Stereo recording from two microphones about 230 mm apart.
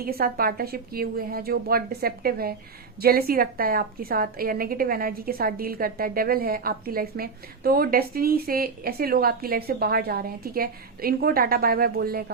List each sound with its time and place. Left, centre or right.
0.0 s a woman's voice: right